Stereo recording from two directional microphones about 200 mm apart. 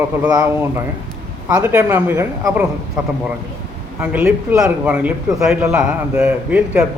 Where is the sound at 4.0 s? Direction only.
5° right (ahead or behind).